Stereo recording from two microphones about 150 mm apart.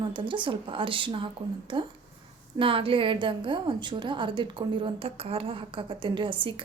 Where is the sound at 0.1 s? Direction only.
35° right (ahead or behind).